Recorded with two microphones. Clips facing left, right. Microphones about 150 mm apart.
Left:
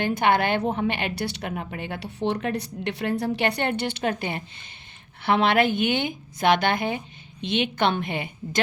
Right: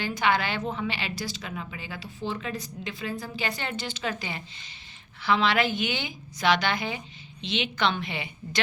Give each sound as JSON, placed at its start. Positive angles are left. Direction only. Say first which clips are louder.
{"t": 0.0, "sound": "a woman's voice", "louder": "left 5 dB", "side_deg": 55}